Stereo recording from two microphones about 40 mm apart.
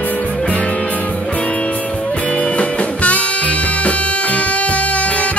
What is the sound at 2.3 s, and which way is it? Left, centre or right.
Music, left.